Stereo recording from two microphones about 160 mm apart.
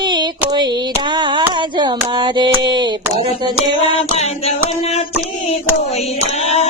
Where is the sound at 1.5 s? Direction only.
30° right (ahead or behind).